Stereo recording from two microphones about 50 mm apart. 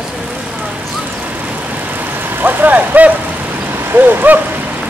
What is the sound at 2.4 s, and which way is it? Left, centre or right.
Speech, right.